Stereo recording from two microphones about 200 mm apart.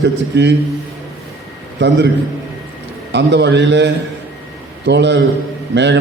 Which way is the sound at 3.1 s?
60° right (ahead or behind).